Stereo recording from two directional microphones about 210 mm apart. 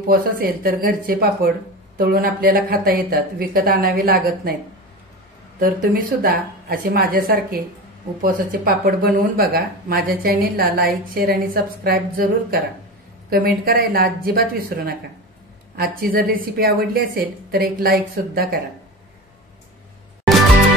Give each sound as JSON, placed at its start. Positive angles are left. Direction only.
{"t": 0.1, "sound": "speech", "side_deg": -45}
{"t": 5.6, "sound": "speech", "side_deg": -40}
{"t": 16.0, "sound": "speech", "side_deg": -45}